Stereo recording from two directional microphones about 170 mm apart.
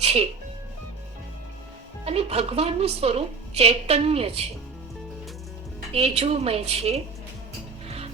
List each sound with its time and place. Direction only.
0.0 s music: 35° right (ahead or behind)
2.0 s a woman's voice: 35° right (ahead or behind)
5.9 s a woman's voice: 35° right (ahead or behind)
7.9 s music: 35° right (ahead or behind)